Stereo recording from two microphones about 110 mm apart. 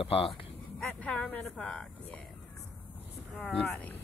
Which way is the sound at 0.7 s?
10° left (ahead or behind).